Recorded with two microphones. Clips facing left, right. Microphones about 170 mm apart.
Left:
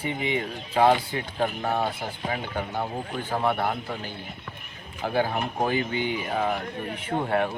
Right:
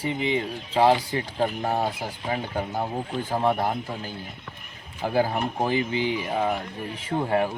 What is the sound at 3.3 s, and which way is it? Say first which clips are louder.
Speech: right 1 dB; 40° right (ahead or behind).